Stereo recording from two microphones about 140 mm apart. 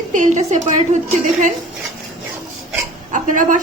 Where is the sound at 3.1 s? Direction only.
65° right (ahead or behind).